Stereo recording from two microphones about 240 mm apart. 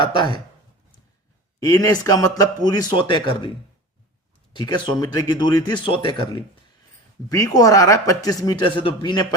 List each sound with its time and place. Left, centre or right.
0.0 s speech: centre
1.5 s speech: centre
4.5 s speech: centre